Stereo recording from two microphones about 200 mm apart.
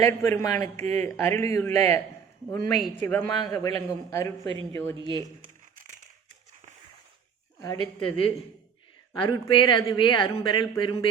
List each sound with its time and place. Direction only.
0.0 s speech: 15° left (ahead or behind)
4.9 s speech: 25° right (ahead or behind)
7.9 s speech: 25° left (ahead or behind)